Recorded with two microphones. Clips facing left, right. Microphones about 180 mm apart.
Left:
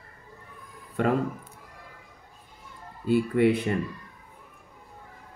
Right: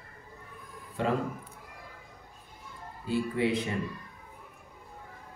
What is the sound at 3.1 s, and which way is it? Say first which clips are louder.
Speech: left 7 dB; 60° left (ahead or behind).